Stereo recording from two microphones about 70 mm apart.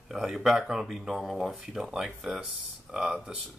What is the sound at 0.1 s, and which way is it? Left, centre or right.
Speech, centre.